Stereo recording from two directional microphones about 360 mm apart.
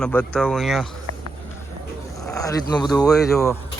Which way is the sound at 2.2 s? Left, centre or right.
Centre.